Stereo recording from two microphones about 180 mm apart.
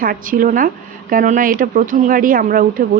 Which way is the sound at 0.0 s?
50° right (ahead or behind).